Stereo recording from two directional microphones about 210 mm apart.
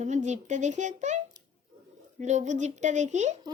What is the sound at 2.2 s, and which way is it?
Speech, 35° right (ahead or behind).